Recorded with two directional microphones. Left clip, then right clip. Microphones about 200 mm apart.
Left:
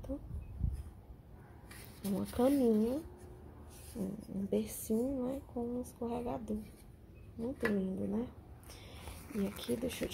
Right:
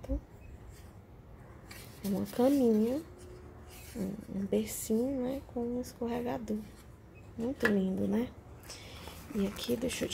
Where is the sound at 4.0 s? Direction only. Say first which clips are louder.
Right 3 dB; 15° right (ahead or behind).